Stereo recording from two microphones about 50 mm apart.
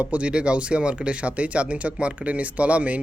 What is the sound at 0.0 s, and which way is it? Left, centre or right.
Speech, right.